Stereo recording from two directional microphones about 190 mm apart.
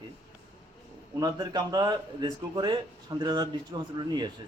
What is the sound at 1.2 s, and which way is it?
A man's voice, 20° right (ahead or behind).